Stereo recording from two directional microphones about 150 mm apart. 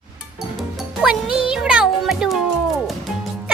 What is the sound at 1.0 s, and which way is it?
Speech, 5° right (ahead or behind).